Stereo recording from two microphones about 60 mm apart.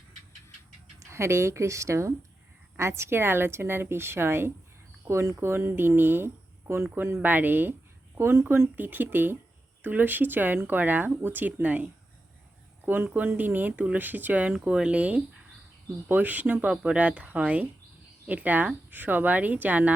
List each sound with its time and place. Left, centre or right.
0.9 s speech: right
8.2 s speech: right
8.7 s speech: right